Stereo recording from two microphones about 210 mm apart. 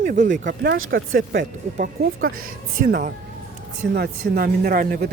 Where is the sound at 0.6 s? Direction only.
70° right (ahead or behind).